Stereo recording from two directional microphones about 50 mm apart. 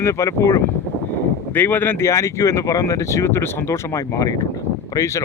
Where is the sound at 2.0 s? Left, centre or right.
Left.